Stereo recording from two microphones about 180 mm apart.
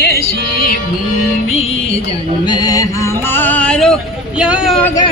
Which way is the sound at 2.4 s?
20° left (ahead or behind).